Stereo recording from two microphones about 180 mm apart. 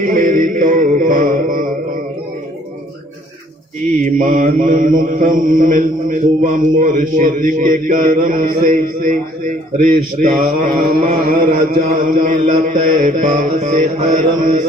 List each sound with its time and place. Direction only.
0.0 s mantra: 50° right (ahead or behind)
3.9 s mantra: 45° right (ahead or behind)